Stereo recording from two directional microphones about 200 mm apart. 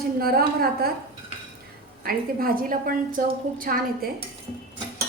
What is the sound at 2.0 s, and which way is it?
A woman's voice, 45° right (ahead or behind).